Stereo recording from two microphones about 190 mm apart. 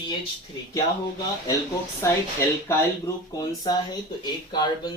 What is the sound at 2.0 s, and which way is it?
Speech, 15° left (ahead or behind).